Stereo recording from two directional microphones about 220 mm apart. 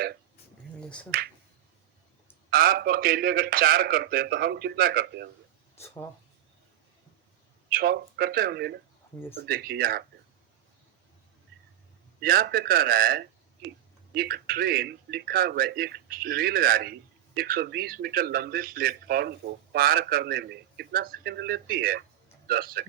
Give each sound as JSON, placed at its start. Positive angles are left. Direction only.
{"t": 0.8, "sound": "finger snapping", "side_deg": 5}
{"t": 2.5, "sound": "a man's voice", "side_deg": -40}
{"t": 5.8, "sound": "speech", "side_deg": 10}
{"t": 7.7, "sound": "a man's voice", "side_deg": -40}
{"t": 12.2, "sound": "a man's voice", "side_deg": -40}